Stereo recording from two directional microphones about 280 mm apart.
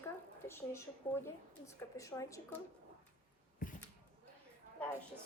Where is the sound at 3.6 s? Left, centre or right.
Left.